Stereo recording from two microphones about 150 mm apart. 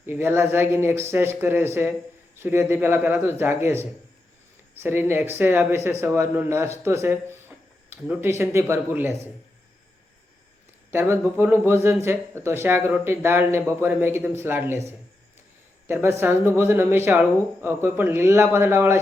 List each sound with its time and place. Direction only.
0.0 s speech: 15° right (ahead or behind)
10.9 s speech: 15° right (ahead or behind)